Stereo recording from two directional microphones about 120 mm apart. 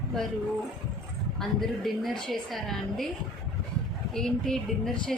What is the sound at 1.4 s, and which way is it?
A woman's voice, centre (ahead or behind).